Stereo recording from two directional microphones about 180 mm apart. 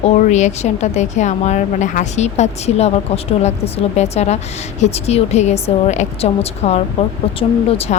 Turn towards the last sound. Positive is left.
turn(degrees=35)  # may be behind; listen again after turning